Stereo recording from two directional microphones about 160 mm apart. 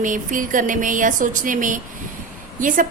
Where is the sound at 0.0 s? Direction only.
55° right (ahead or behind).